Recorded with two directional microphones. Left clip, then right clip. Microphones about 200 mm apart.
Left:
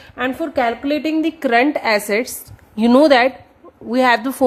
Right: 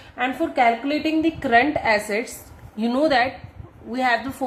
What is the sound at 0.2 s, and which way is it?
A woman's voice, 55° left (ahead or behind).